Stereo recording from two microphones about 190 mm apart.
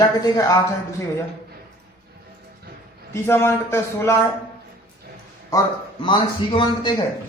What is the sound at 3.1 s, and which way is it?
Speech, 15° left (ahead or behind).